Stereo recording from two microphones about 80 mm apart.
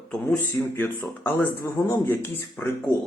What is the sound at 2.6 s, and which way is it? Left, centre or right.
Speech, left.